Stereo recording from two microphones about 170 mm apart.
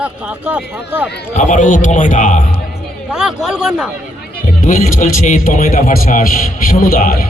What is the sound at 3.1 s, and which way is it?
Speech, 5° right (ahead or behind).